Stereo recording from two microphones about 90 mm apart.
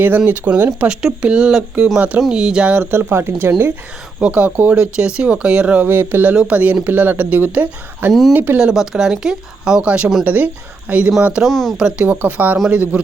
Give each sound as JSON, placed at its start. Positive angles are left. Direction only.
{"t": 0.3, "sound": "speech", "side_deg": -20}
{"t": 2.9, "sound": "speech", "side_deg": -25}
{"t": 4.2, "sound": "speech", "side_deg": -15}
{"t": 8.5, "sound": "speech", "side_deg": -10}
{"t": 11.4, "sound": "speech", "side_deg": 0}
{"t": 11.8, "sound": "speech", "side_deg": -10}